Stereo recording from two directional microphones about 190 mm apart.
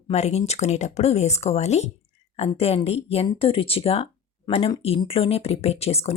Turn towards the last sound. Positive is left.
turn(degrees=30)  # may be behind; listen again after turning